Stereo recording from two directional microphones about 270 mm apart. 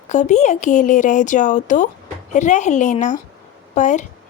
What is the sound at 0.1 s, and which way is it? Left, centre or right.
Speech, left.